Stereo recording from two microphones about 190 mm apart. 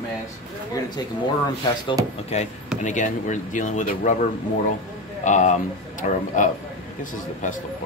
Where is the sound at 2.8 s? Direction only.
40° left (ahead or behind).